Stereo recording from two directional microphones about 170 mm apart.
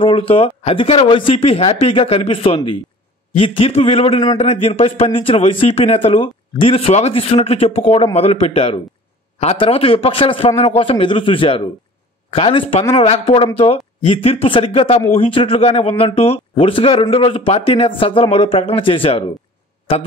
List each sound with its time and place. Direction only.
0.0 s a man's voice: 30° left (ahead or behind)